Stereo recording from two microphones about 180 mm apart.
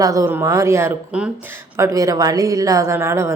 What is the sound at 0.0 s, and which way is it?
A woman's voice, 20° right (ahead or behind).